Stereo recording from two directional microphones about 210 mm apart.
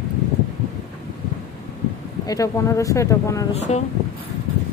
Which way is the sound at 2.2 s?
15° left (ahead or behind).